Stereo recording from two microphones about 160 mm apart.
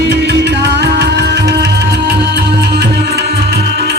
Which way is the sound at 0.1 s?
90° right.